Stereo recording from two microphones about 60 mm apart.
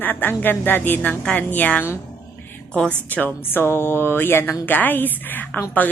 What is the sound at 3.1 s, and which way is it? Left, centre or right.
Speech, left.